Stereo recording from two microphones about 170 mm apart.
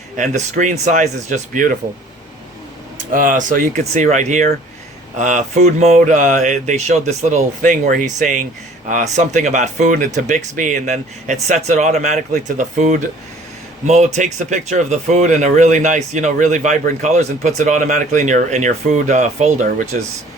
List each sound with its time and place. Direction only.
0.2 s speech: 45° right (ahead or behind)
3.1 s speech: 50° right (ahead or behind)